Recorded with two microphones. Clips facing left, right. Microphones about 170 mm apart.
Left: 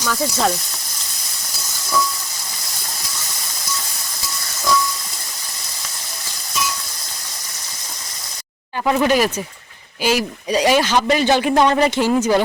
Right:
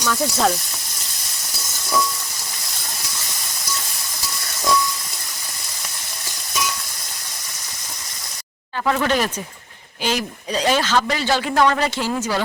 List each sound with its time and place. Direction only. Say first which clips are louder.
0.0 s sizzle: even; centre (ahead or behind)
8.9 s a man's voice: left 4 dB; 15° left (ahead or behind)